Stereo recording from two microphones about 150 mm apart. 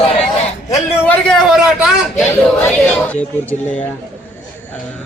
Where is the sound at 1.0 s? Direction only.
10° left (ahead or behind).